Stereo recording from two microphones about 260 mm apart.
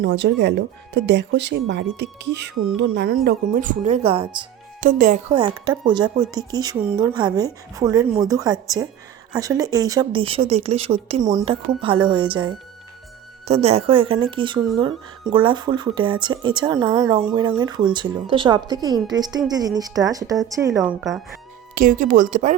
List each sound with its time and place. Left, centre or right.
0.0 s speech: right; by 4.4 s centre
4.8 s speech: right
5.3 s speech: centre
20.7 s speech: centre
21.8 s speech: right